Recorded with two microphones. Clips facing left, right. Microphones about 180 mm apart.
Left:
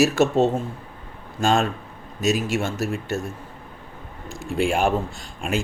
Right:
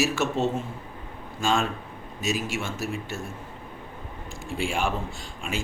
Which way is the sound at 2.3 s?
60° left (ahead or behind).